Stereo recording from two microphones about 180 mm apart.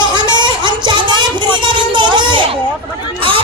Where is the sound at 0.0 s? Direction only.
25° right (ahead or behind).